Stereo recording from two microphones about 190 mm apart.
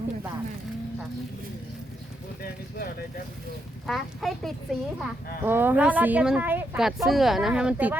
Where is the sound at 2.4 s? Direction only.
50° left (ahead or behind).